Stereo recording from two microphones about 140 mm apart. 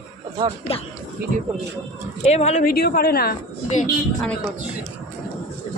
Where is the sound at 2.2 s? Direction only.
50° left (ahead or behind).